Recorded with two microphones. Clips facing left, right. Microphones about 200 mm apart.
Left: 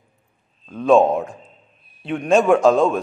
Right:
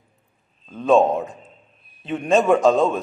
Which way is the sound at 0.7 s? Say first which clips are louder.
Left 2 dB; centre (ahead or behind).